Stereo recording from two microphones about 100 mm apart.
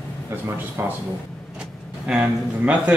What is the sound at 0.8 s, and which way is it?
Speech, 25° right (ahead or behind).